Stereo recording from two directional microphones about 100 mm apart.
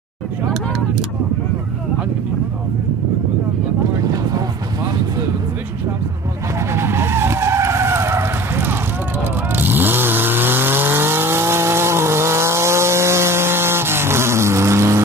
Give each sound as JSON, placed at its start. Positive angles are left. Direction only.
{"t": 4.0, "sound": "boat", "side_deg": -40}
{"t": 6.7, "sound": "vehicle", "side_deg": -25}